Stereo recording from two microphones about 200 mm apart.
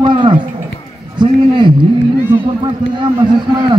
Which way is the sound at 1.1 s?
25° right (ahead or behind).